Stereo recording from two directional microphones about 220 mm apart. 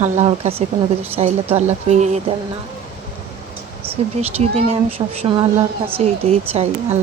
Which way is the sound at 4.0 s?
30° right (ahead or behind).